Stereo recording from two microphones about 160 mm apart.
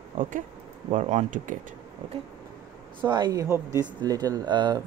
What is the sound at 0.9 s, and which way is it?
Speech, 55° right (ahead or behind).